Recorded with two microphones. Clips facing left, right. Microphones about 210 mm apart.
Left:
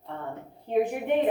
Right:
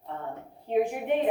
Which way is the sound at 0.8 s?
55° left (ahead or behind).